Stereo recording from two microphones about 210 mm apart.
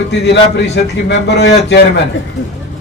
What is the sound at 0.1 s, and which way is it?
A man's voice, 55° left (ahead or behind).